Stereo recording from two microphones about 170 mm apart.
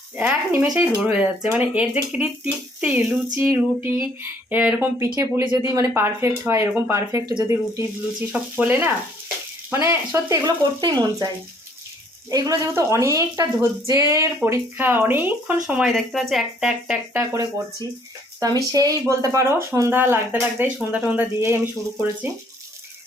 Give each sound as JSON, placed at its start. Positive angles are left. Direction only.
{"t": 0.2, "sound": "a woman's voice", "side_deg": -10}
{"t": 12.3, "sound": "a woman's voice", "side_deg": -20}
{"t": 17.3, "sound": "a woman's voice", "side_deg": -20}